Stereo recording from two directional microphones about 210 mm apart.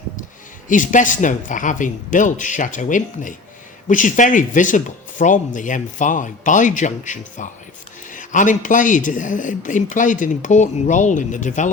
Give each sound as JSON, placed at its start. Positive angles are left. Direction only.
{"t": 0.7, "sound": "speech", "side_deg": 35}